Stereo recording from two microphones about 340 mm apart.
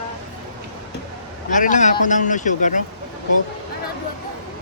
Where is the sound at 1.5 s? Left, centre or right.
Left.